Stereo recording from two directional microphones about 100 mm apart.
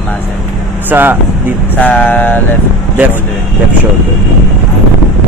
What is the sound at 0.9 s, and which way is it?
Speech, 20° right (ahead or behind).